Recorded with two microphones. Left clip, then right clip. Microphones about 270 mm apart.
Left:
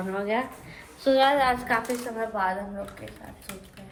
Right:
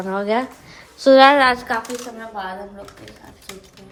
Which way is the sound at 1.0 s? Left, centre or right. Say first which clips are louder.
Right 10 dB; right.